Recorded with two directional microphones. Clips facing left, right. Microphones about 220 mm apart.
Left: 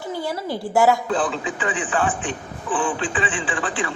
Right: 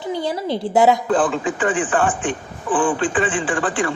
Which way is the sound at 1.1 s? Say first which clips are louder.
Right 5 dB; 50° right (ahead or behind).